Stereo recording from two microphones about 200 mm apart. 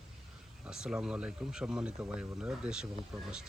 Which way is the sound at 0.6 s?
5° right (ahead or behind).